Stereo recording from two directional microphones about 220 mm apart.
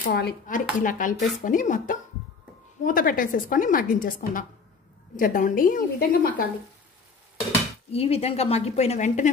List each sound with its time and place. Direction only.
0.0 s a woman's voice: 45° left (ahead or behind)
7.9 s a woman's voice: 25° left (ahead or behind)